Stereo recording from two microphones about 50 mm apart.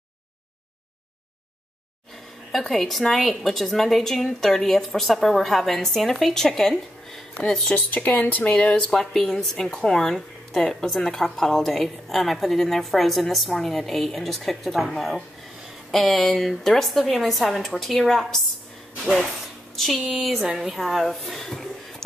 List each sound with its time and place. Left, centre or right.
2.5 s speech: centre
7.7 s speech: left
8.9 s speech: centre
19.7 s speech: centre